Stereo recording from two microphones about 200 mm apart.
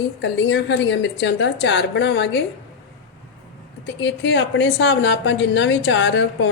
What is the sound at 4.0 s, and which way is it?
A woman's voice, 65° left (ahead or behind).